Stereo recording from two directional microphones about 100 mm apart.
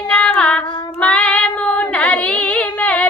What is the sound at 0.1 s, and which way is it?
Child singing, 10° left (ahead or behind).